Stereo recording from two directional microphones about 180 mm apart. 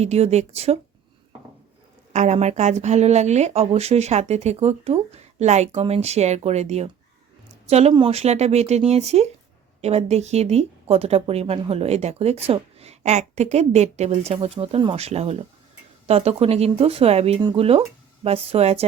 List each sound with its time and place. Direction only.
0.0 s speech: 35° right (ahead or behind)
2.1 s speech: 40° right (ahead or behind)